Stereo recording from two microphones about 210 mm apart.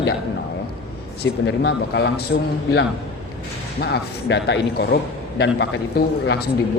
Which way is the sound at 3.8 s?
55° left (ahead or behind).